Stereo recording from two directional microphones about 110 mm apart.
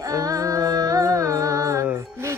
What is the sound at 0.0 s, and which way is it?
Music, 35° right (ahead or behind).